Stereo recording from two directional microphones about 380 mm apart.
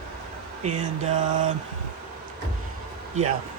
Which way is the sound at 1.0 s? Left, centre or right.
Centre.